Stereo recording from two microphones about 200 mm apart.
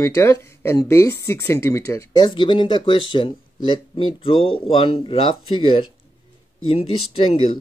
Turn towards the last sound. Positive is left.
turn(degrees=25)  # may be behind; listen again after turning